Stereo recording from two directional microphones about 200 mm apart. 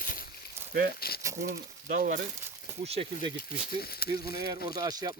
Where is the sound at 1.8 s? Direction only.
45° right (ahead or behind).